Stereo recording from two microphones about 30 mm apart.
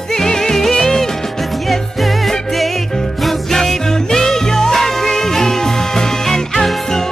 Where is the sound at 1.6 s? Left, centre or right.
Centre.